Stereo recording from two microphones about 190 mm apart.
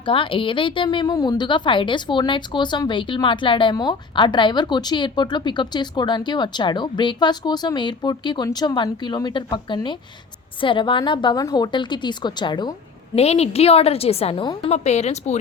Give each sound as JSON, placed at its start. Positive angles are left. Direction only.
{"t": 0.0, "sound": "a woman's voice", "side_deg": 25}
{"t": 13.1, "sound": "a woman's voice", "side_deg": 35}